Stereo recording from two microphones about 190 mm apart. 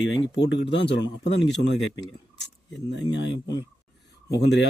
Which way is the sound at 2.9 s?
70° left (ahead or behind).